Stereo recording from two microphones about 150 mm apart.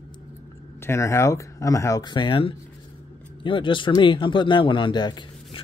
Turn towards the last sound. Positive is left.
turn(degrees=30)  # may be behind; listen again after turning